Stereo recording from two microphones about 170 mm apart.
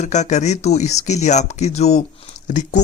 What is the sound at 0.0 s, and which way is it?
Speech, 45° left (ahead or behind).